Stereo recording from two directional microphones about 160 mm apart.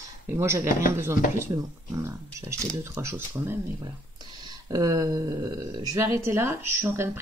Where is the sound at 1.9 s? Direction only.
15° right (ahead or behind).